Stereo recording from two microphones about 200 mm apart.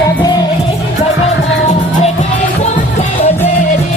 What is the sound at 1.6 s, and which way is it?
Music, 35° left (ahead or behind).